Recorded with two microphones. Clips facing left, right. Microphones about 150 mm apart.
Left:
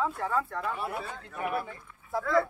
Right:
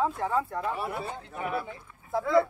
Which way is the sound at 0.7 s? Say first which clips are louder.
Right 2 dB; 5° right (ahead or behind).